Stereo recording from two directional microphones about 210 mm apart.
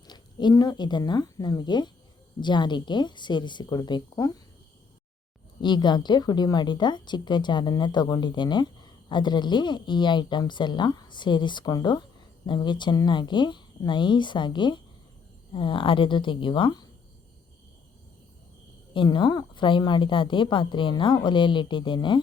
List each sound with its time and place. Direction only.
0.1 s speech: 20° left (ahead or behind)
5.6 s speech: 20° left (ahead or behind)
18.9 s speech: 20° left (ahead or behind)